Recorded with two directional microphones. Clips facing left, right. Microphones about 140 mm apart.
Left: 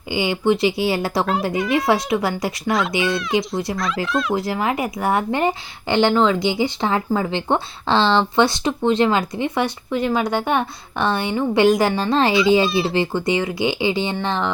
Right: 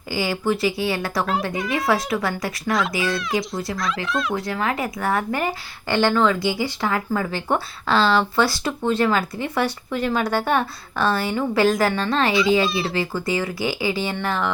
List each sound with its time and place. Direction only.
0.2 s speech: 20° left (ahead or behind)
1.2 s speech: centre (ahead or behind)
2.0 s speech: 25° left (ahead or behind)
2.6 s speech: centre (ahead or behind)
4.4 s a woman's voice: 25° left (ahead or behind)
12.3 s speech: centre (ahead or behind)
12.9 s speech: 25° left (ahead or behind)